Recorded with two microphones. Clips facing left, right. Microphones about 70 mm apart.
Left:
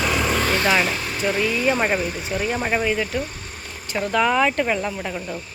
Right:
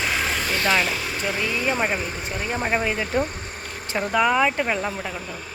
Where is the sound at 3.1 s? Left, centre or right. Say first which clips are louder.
Right 3 dB; right.